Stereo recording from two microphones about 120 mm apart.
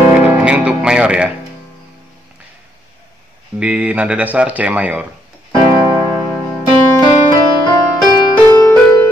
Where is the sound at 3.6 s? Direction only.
10° right (ahead or behind).